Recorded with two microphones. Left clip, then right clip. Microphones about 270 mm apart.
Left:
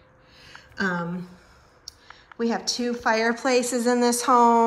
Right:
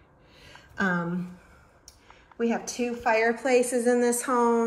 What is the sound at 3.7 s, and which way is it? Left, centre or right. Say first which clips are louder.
Speech: left 1 dB; left.